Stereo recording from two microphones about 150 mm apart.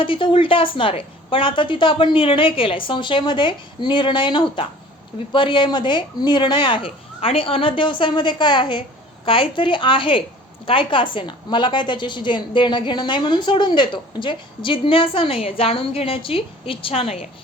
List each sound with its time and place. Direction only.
0.0 s a woman's voice: 35° left (ahead or behind)